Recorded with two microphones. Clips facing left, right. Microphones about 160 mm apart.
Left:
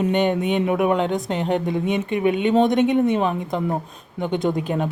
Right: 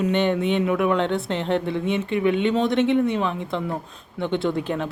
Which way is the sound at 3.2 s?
45° left (ahead or behind).